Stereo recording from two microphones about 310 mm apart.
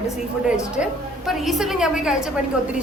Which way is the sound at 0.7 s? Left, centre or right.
Centre.